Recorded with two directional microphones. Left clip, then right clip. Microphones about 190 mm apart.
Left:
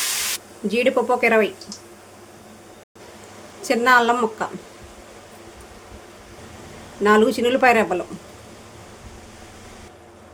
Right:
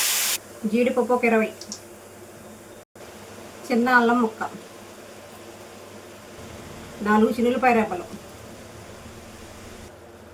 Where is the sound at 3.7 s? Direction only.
65° left (ahead or behind).